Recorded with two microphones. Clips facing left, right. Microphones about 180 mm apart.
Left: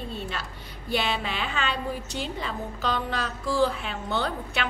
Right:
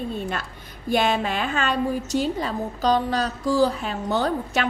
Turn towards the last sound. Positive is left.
turn(degrees=-45)  # may be behind; listen again after turning